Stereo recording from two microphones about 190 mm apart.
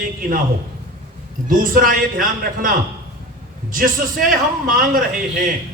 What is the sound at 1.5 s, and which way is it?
A man's voice, 45° right (ahead or behind).